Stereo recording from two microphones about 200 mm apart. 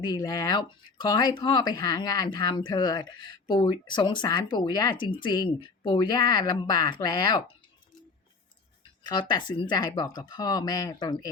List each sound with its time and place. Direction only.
0.0 s speech: 20° left (ahead or behind)
9.0 s speech: 20° left (ahead or behind)